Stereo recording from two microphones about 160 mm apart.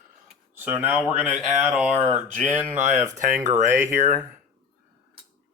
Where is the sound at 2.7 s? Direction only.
50° right (ahead or behind).